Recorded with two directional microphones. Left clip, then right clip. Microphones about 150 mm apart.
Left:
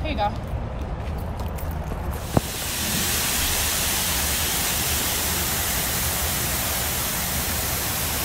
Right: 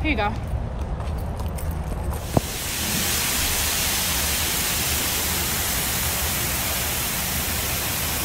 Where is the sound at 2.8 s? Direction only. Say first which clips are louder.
Right 1 dB; 15° left (ahead or behind).